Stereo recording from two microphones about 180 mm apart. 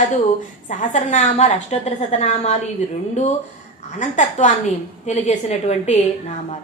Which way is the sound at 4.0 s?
45° left (ahead or behind).